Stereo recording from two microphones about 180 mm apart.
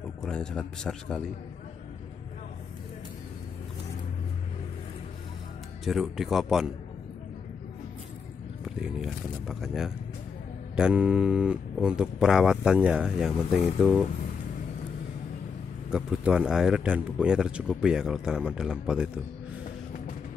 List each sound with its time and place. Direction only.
0.2 s speech: 5° left (ahead or behind)
5.9 s speech: centre (ahead or behind)
8.6 s speech: centre (ahead or behind)
15.9 s speech: 5° right (ahead or behind)